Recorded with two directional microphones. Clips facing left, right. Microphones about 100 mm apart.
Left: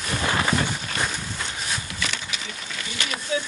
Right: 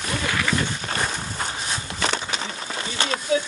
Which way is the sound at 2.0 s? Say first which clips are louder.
Right 6 dB; 35° right (ahead or behind).